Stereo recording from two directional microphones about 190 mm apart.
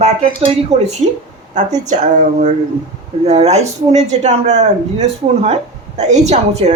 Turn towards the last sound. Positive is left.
turn(degrees=-35)  # may be behind; listen again after turning